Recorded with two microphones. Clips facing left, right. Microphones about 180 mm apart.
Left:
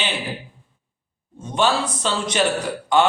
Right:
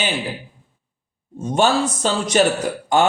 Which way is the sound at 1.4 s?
45° right (ahead or behind).